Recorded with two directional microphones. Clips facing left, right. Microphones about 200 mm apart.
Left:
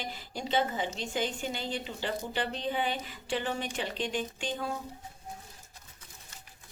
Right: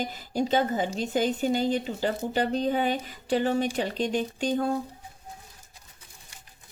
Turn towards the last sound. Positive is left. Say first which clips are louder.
# right 9 dB
turn(degrees=-40)  # may be behind; listen again after turning